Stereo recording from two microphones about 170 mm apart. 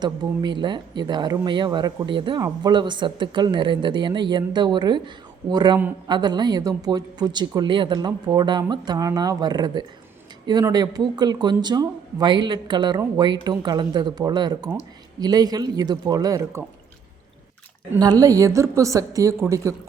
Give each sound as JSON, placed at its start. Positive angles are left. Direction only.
{"t": 0.0, "sound": "speech", "side_deg": -25}
{"t": 17.9, "sound": "speech", "side_deg": -20}